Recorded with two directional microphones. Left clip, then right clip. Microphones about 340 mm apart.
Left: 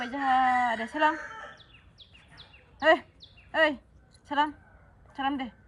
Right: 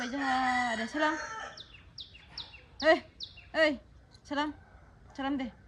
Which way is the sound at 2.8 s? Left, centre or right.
Centre.